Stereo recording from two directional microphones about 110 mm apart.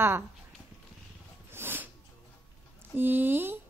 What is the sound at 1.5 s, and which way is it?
Snort, 20° right (ahead or behind).